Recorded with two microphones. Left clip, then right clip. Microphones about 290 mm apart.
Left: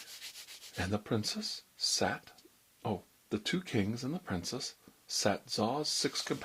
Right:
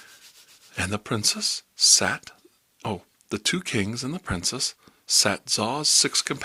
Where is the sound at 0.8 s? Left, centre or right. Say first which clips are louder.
Right 8 dB; right.